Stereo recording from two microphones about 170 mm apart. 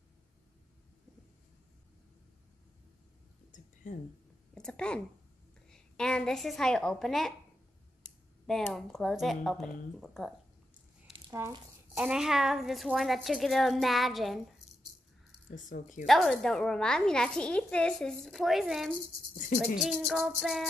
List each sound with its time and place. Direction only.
3.8 s speech: 50° left (ahead or behind)
4.6 s a woman's voice: 5° left (ahead or behind)
11.3 s a woman's voice: 10° right (ahead or behind)
15.5 s a woman's voice: 50° left (ahead or behind)
16.1 s a woman's voice: centre (ahead or behind)